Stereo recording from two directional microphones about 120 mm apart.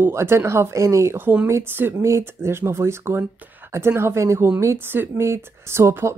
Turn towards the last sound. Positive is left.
turn(degrees=-20)  # may be behind; listen again after turning